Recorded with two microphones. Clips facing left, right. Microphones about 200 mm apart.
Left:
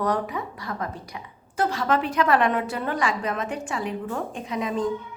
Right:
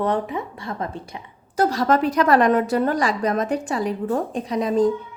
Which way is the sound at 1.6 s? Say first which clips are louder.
Right 5 dB; 40° right (ahead or behind).